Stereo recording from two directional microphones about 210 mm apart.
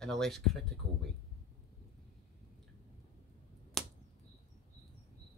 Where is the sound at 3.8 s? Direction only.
Centre (ahead or behind).